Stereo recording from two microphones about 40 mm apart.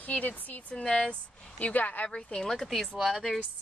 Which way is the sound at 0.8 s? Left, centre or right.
Left.